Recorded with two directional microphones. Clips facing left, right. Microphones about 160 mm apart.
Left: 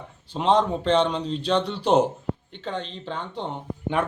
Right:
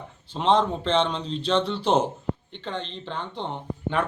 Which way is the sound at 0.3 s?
10° left (ahead or behind).